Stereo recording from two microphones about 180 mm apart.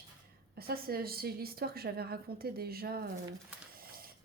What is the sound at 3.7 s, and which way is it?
Printer, 55° right (ahead or behind).